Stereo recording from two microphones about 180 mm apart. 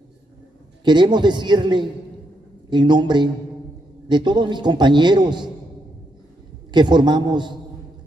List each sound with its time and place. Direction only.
0.8 s a man's voice: 25° right (ahead or behind)
6.7 s a man's voice: 25° right (ahead or behind)